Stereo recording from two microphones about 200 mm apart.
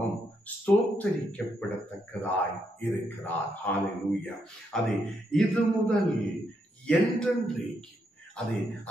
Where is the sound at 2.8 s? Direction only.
10° left (ahead or behind).